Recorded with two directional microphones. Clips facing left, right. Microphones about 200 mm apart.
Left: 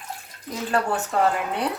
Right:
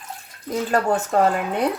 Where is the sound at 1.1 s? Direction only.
45° right (ahead or behind).